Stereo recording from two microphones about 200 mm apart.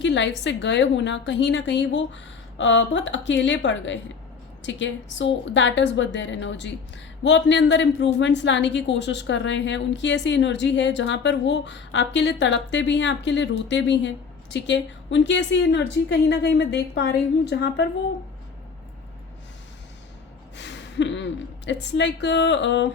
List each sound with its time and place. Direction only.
0.0 s a woman's voice: 65° left (ahead or behind)
20.6 s a sound: 60° left (ahead or behind)
21.7 s a woman's voice: 60° left (ahead or behind)